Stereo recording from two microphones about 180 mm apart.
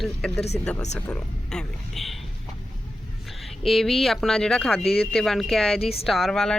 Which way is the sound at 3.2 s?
Centre (ahead or behind).